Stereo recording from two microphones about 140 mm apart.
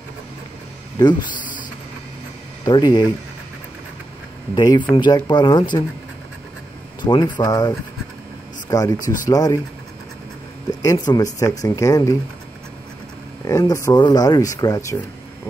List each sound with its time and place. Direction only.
1.3 s a sound: 70° left (ahead or behind)
2.6 s speech: 30° left (ahead or behind)
4.6 s speech: 30° left (ahead or behind)
7.0 s speech: 30° left (ahead or behind)
10.7 s speech: 25° left (ahead or behind)
13.5 s speech: 20° left (ahead or behind)